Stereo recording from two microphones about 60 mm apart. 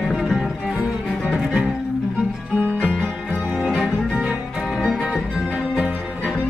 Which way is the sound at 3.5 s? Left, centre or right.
Centre.